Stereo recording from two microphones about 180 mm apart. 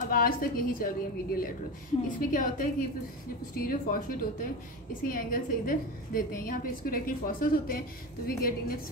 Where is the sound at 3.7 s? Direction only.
50° left (ahead or behind).